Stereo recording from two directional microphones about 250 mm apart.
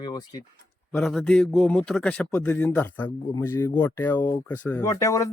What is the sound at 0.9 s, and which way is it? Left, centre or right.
A man's voice, centre.